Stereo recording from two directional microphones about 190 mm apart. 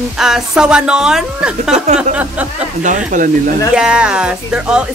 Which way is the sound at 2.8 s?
40° right (ahead or behind).